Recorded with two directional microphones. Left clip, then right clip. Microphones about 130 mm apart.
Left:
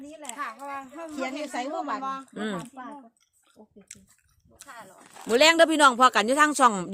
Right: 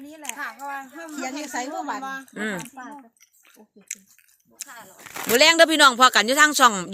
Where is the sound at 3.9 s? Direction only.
5° left (ahead or behind).